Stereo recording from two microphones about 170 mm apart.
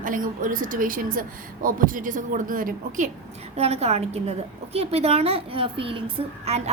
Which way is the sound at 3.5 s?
40° right (ahead or behind).